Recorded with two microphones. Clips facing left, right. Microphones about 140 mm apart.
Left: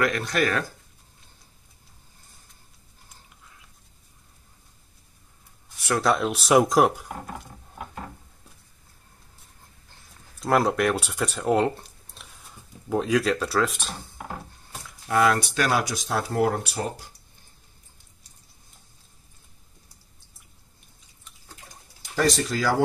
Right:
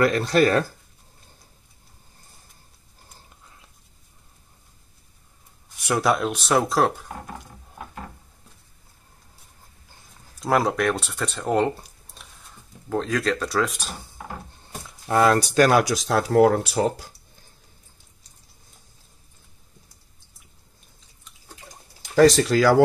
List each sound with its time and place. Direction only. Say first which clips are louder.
0.0 s speech: right 6 dB; 35° right (ahead or behind)
5.8 s a sound: right 1 dB; 15° right (ahead or behind)
6.0 s speech: left 1 dB; centre (ahead or behind)
10.4 s speech: even; centre (ahead or behind)
15.0 s speech: right 3 dB; 35° right (ahead or behind)
15.8 s speech: right 5 dB; 90° right
22.1 s speech: right 8 dB; 90° right